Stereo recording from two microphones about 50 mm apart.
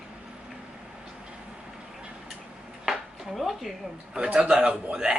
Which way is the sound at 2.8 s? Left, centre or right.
Centre.